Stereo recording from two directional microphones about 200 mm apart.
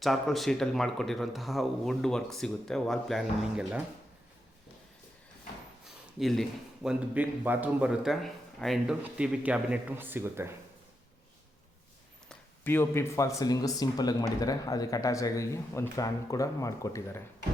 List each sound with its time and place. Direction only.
0.0 s speech: centre (ahead or behind)
5.8 s a sound: centre (ahead or behind)
6.8 s speech: 10° right (ahead or behind)
12.3 s speech: 10° left (ahead or behind)